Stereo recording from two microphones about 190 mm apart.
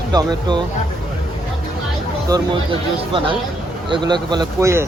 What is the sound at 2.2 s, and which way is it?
Speech, 25° right (ahead or behind).